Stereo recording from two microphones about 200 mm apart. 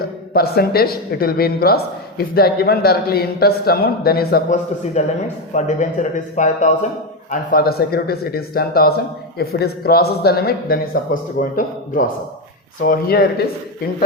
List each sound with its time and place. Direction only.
0.0 s a man's voice: 50° left (ahead or behind)
7.3 s speech: 50° left (ahead or behind)